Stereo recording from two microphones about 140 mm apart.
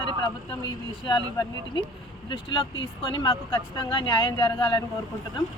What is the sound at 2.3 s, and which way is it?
A woman's voice, 35° left (ahead or behind).